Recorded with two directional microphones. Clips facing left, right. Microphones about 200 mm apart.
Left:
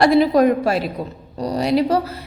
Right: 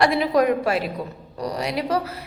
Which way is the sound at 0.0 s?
35° left (ahead or behind).